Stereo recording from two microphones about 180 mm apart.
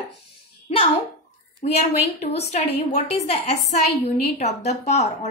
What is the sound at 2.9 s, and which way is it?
A woman's voice, 40° left (ahead or behind).